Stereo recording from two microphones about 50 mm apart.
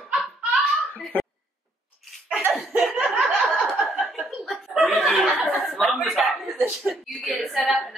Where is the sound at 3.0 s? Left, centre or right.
Centre.